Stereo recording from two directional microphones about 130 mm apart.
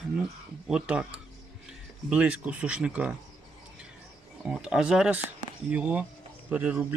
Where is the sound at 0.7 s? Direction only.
10° right (ahead or behind).